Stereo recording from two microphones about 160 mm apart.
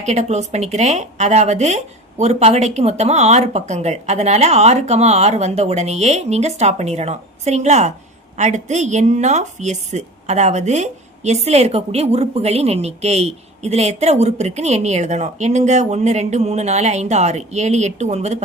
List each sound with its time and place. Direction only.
0.0 s a woman's voice: 45° right (ahead or behind)